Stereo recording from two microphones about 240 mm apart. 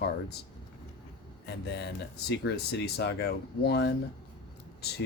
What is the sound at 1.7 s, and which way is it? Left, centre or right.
Speech, left.